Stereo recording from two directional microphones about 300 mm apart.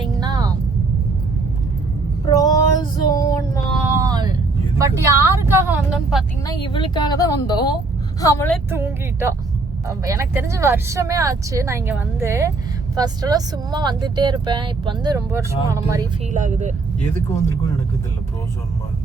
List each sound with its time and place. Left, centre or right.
0.0 s music: centre
2.3 s female singing: centre
3.9 s vehicle: centre
6.4 s a woman's voice: centre
8.7 s speech: centre
16.3 s speech: right